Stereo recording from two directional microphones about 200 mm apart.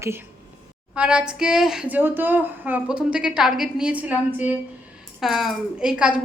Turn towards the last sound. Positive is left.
turn(degrees=-5)  # may be behind; listen again after turning